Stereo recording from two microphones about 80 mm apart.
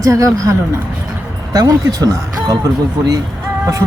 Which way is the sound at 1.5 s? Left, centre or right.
Right.